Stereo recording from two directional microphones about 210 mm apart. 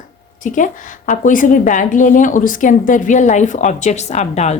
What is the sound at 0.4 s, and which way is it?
A woman's voice, 35° left (ahead or behind).